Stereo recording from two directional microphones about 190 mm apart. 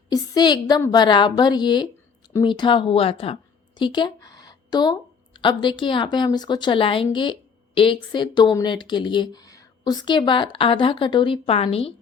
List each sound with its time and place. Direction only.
0.1 s a woman's voice: 20° left (ahead or behind)